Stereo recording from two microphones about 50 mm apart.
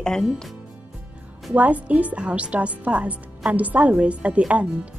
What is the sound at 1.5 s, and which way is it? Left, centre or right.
A woman's voice, right.